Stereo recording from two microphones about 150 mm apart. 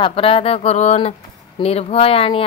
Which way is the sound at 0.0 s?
40° left (ahead or behind).